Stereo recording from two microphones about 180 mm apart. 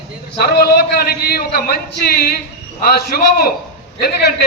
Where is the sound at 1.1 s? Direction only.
60° left (ahead or behind).